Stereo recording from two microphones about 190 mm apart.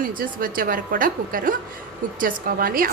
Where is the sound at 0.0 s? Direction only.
45° right (ahead or behind).